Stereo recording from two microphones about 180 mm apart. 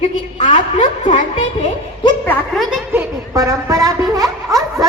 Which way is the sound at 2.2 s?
Centre (ahead or behind).